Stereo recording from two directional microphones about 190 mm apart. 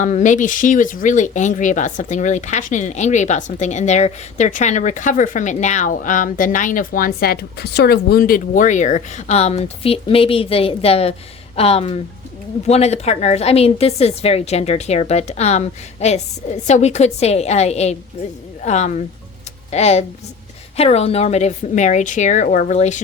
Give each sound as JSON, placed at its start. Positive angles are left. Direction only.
{"t": 0.0, "sound": "speech", "side_deg": 40}